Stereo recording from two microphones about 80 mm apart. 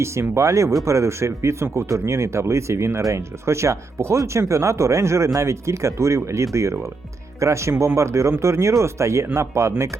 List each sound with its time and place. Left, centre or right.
0.0 s speech: right